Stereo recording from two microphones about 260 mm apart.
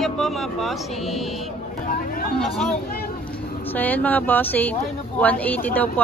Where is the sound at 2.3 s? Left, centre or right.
Centre.